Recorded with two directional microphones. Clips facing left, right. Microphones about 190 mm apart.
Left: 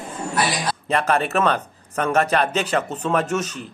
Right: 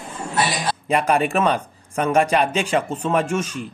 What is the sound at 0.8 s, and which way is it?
Speech, 10° right (ahead or behind).